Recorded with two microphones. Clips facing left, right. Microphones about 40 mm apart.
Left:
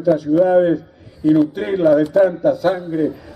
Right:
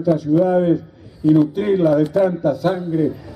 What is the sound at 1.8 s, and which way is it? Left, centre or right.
Speech, centre.